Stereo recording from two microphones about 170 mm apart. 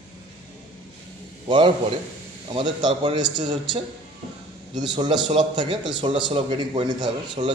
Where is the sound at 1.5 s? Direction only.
30° right (ahead or behind).